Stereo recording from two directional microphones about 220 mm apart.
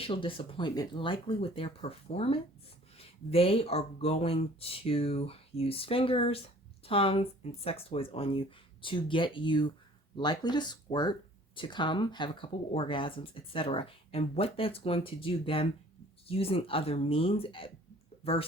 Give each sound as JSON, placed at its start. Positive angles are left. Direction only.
{"t": 0.0, "sound": "speech", "side_deg": 25}